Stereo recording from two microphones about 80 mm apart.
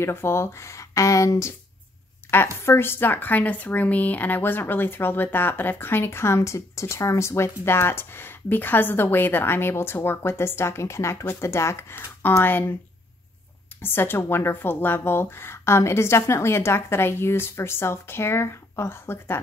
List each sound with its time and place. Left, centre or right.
0.0 s speech: left
2.3 s speech: left
13.7 s speech: left